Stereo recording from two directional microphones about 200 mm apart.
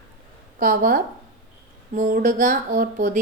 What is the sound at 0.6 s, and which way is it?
Speech, 45° right (ahead or behind).